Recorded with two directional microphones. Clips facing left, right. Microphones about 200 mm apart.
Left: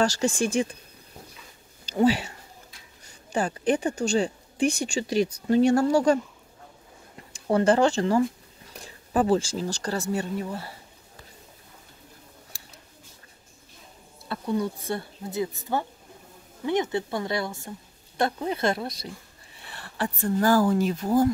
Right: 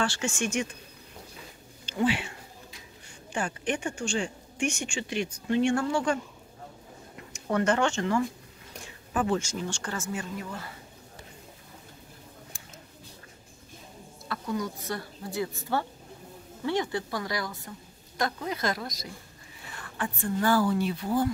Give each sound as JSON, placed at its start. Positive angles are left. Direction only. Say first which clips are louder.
{"t": 0.0, "sound": "a woman's voice", "louder": "left 6 dB", "side_deg": 40}
{"t": 1.9, "sound": "speech", "louder": "left 5 dB", "side_deg": 40}
{"t": 3.3, "sound": "a woman's voice", "louder": "left 6 dB", "side_deg": 35}
{"t": 7.3, "sound": "a woman's voice", "louder": "left 5 dB", "side_deg": 30}
{"t": 14.3, "sound": "a woman's voice", "louder": "left 5 dB", "side_deg": 30}